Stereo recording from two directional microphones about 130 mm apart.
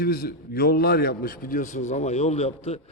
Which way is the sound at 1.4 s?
80° left.